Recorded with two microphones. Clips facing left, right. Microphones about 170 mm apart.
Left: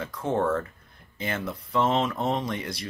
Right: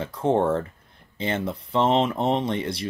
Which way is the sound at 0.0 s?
30° right (ahead or behind).